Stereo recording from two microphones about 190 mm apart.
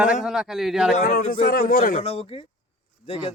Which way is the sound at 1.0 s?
50° left (ahead or behind).